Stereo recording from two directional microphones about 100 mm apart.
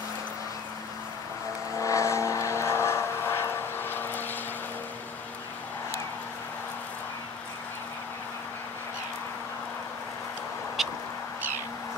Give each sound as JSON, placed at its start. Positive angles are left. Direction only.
{"t": 1.8, "sound": "vehicle", "side_deg": 30}
{"t": 10.8, "sound": "duck", "side_deg": 0}